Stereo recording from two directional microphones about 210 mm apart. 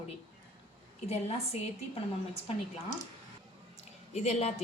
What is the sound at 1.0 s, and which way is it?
Speech, 30° left (ahead or behind).